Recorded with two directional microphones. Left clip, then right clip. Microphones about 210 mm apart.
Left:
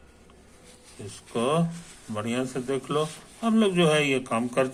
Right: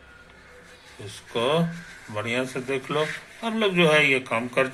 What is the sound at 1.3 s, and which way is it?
A man's voice, 20° left (ahead or behind).